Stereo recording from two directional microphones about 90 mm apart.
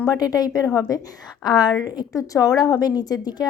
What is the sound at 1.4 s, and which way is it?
Speech, 50° left (ahead or behind).